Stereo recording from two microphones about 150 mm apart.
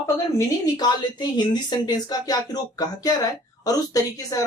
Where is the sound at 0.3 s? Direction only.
25° left (ahead or behind).